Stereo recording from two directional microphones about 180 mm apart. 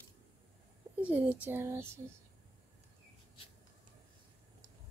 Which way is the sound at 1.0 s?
10° right (ahead or behind).